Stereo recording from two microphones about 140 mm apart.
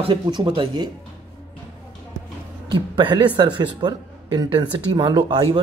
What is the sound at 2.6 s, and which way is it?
A man's voice, 35° right (ahead or behind).